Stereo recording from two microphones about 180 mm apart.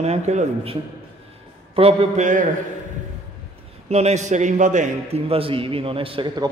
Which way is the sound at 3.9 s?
40° right (ahead or behind).